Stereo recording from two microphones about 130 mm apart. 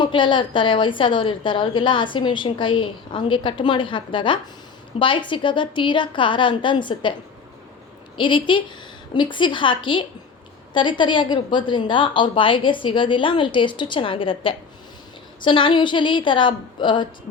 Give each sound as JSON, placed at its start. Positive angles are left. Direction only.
{"t": 0.0, "sound": "a woman's voice", "side_deg": 40}
{"t": 8.1, "sound": "a woman's voice", "side_deg": 40}